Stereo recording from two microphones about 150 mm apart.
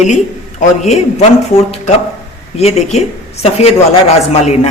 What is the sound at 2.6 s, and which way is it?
Speech, 45° left (ahead or behind).